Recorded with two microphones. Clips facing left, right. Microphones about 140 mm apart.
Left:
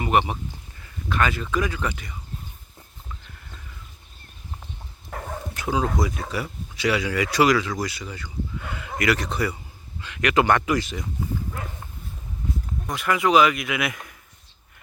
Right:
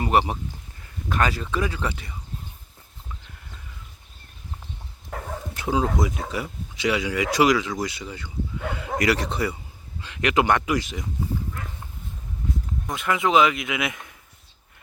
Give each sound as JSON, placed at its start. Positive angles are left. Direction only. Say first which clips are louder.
{"t": 0.0, "sound": "speech", "louder": "even", "side_deg": -35}
{"t": 5.5, "sound": "speech", "louder": "right 1 dB", "side_deg": -25}
{"t": 10.3, "sound": "speech", "louder": "left 1 dB", "side_deg": -15}
{"t": 12.9, "sound": "speech", "louder": "left 1 dB", "side_deg": -20}